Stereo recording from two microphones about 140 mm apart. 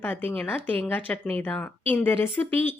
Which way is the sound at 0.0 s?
10° left (ahead or behind).